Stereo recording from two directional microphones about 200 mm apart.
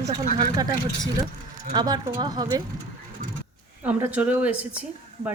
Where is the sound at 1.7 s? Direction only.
20° right (ahead or behind).